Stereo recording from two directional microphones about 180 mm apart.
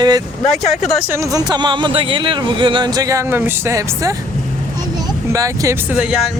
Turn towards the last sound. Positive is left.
turn(degrees=0)  # may be behind; listen again after turning